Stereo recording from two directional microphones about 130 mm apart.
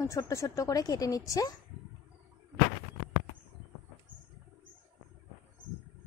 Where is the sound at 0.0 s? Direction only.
25° left (ahead or behind).